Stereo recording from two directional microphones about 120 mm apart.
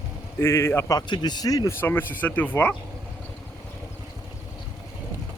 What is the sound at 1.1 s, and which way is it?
Speech, 35° left (ahead or behind).